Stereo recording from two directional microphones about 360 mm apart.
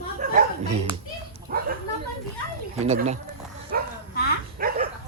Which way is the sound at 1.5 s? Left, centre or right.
Right.